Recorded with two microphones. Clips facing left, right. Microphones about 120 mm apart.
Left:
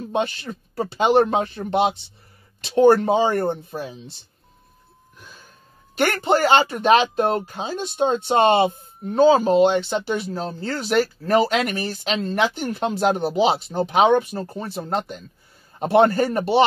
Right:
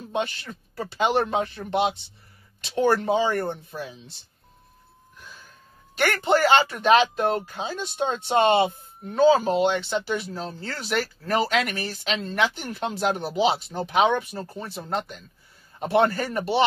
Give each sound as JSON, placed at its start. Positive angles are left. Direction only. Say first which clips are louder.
{"t": 0.1, "sound": "speech", "louder": "left 4 dB", "side_deg": 35}
{"t": 5.9, "sound": "speech", "louder": "left 2 dB", "side_deg": 30}
{"t": 7.2, "sound": "speech", "louder": "left 3 dB", "side_deg": 35}
{"t": 7.4, "sound": "speech", "louder": "left 3 dB", "side_deg": 25}
{"t": 10.3, "sound": "speech", "louder": "left 6 dB", "side_deg": 45}
{"t": 15.8, "sound": "a man's voice", "louder": "left 5 dB", "side_deg": 50}
{"t": 16.2, "sound": "speech", "louder": "left 6 dB", "side_deg": 35}